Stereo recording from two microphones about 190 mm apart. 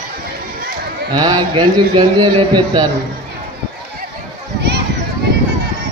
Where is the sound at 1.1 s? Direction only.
20° right (ahead or behind).